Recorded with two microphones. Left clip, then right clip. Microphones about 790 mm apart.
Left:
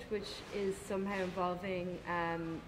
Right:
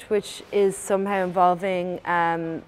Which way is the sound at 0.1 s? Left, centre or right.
Right.